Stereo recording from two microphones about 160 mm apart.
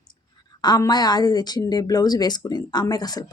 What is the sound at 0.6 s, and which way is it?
Speech, 25° left (ahead or behind).